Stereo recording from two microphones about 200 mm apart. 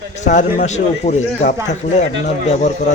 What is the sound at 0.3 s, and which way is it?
Speech, 35° left (ahead or behind).